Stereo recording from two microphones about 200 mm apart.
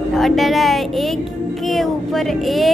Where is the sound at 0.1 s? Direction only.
Centre (ahead or behind).